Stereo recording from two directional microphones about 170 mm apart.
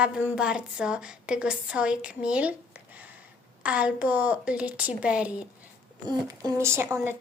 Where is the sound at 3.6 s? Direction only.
10° right (ahead or behind).